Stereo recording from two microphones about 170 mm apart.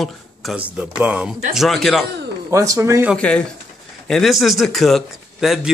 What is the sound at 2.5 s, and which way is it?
Speech, 20° right (ahead or behind).